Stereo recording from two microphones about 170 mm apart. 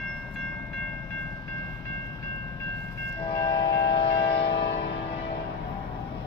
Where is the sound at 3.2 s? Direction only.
30° left (ahead or behind).